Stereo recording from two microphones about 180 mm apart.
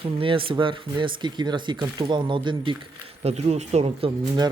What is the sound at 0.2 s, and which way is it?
Speech, 30° right (ahead or behind).